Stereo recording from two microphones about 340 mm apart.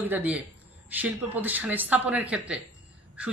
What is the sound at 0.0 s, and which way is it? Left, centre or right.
Speech, centre.